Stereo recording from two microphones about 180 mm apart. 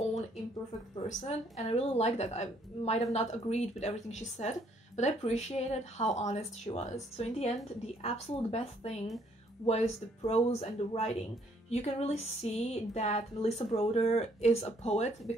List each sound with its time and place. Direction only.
1.0 s speech: 35° left (ahead or behind)